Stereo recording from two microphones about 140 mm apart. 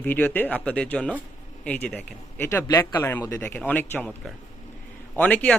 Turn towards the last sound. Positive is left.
turn(degrees=10)  # may be behind; listen again after turning